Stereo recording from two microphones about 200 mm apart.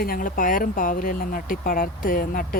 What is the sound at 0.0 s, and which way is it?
Speech, 45° left (ahead or behind).